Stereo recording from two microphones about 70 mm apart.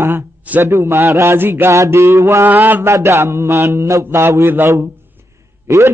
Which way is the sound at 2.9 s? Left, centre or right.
Right.